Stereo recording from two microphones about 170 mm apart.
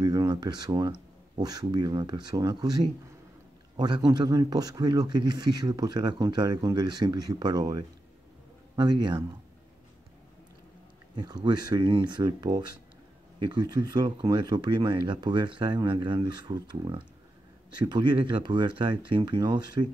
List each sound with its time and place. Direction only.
0.0 s speech: 25° right (ahead or behind)
11.1 s speech: 25° right (ahead or behind)